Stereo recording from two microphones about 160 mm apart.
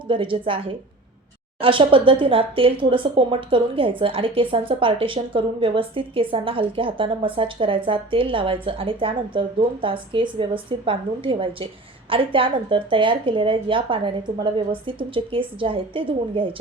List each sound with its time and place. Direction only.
0.1 s speech: 30° right (ahead or behind)
1.6 s speech: 35° right (ahead or behind)